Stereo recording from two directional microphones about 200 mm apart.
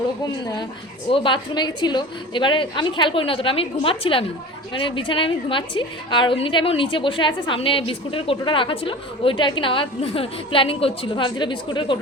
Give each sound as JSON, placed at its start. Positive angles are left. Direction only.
{"t": 1.1, "sound": "a woman's voice", "side_deg": 25}